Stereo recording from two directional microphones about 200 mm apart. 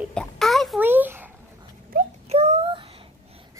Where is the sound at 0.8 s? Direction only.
10° right (ahead or behind).